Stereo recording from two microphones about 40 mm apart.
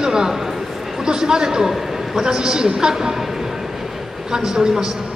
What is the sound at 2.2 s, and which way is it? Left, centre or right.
A man's voice, centre.